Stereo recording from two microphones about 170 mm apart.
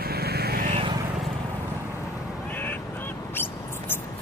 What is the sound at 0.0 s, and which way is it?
Vehicle, 65° right (ahead or behind).